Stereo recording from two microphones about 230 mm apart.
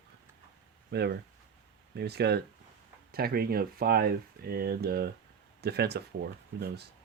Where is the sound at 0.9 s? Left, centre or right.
Right.